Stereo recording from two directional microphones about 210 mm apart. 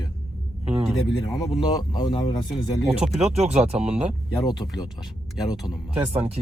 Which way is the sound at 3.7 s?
5° right (ahead or behind).